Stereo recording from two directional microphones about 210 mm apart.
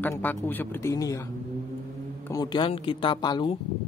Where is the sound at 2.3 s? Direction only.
20° left (ahead or behind).